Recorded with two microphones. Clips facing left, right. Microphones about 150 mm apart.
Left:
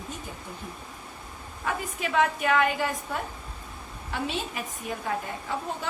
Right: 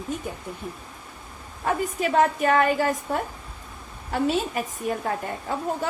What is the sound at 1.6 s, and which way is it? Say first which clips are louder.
A woman's voice: right 6 dB; 40° right (ahead or behind).